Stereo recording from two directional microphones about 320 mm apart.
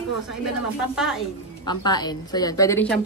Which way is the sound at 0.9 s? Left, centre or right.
Centre.